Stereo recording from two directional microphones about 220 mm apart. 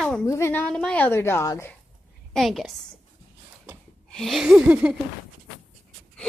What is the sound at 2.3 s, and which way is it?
Speech, centre (ahead or behind).